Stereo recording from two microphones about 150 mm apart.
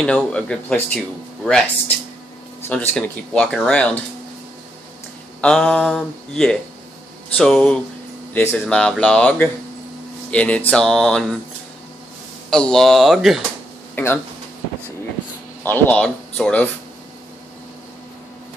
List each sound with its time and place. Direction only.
0.0 s speech: 5° left (ahead or behind)
2.7 s speech: 10° left (ahead or behind)
5.4 s speech: 5° left (ahead or behind)
12.4 s speech: 5° left (ahead or behind)
13.9 s speech: 10° left (ahead or behind)
15.6 s speech: 10° left (ahead or behind)